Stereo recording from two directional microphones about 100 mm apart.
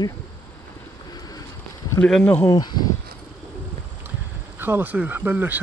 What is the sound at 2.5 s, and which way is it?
Speech, 40° left (ahead or behind).